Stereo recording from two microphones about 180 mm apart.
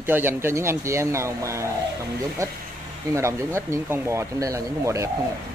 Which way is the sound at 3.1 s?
15° right (ahead or behind).